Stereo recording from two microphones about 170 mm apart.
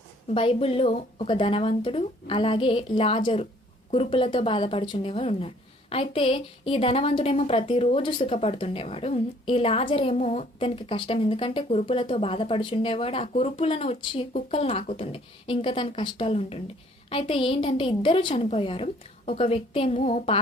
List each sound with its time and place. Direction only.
0.3 s a woman's voice: 35° left (ahead or behind)
10.6 s a woman's voice: 30° left (ahead or behind)